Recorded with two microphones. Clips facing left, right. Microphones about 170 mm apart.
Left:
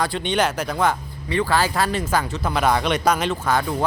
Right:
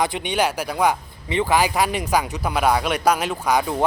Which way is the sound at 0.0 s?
15° right (ahead or behind).